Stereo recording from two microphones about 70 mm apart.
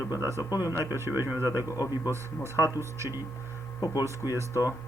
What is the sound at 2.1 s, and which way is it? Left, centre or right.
Speech, right.